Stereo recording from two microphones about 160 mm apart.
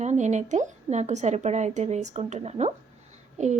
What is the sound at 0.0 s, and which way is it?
A woman's voice, 45° right (ahead or behind).